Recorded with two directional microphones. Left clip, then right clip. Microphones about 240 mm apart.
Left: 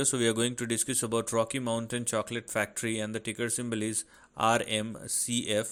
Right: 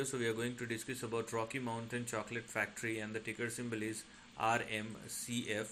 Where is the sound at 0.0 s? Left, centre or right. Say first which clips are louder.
Left 9 dB; left.